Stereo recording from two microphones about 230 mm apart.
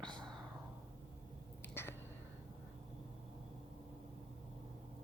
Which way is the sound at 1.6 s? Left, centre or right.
Centre.